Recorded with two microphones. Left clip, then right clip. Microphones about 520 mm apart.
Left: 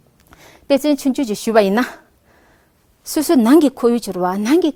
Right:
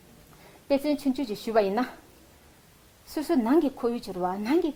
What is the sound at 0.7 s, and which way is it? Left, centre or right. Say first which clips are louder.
Speech: left 10 dB; left.